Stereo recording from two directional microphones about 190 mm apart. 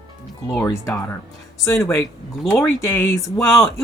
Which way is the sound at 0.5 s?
10° left (ahead or behind).